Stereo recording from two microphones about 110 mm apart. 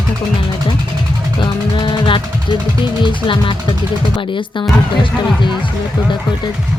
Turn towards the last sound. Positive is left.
turn(degrees=45)  # may be behind; listen again after turning